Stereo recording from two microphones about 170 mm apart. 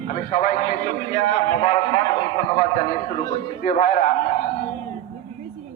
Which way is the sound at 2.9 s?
55° left (ahead or behind).